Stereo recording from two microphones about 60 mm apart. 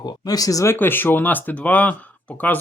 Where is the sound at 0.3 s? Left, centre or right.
Left.